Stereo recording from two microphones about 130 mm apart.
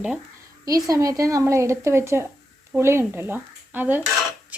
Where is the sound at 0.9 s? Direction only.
25° right (ahead or behind).